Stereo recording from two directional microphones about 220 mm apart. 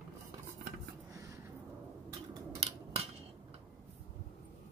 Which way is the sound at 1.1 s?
15° right (ahead or behind).